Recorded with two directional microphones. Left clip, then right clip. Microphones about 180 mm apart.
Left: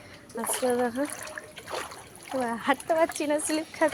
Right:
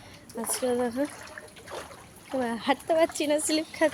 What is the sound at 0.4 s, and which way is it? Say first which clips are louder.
Speech: left 1 dB; 10° right (ahead or behind).